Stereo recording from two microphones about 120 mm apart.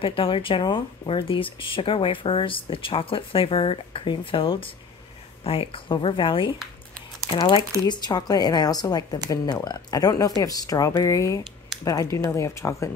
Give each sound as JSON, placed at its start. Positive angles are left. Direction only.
{"t": 0.0, "sound": "speech", "side_deg": 45}